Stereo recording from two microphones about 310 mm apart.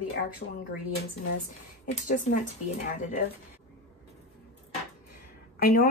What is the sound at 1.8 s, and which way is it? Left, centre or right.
Speech, left.